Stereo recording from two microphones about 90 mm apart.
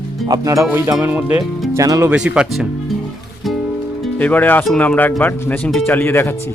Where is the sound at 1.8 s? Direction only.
40° right (ahead or behind).